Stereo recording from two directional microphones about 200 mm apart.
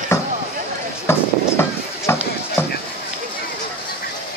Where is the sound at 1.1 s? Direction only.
10° left (ahead or behind).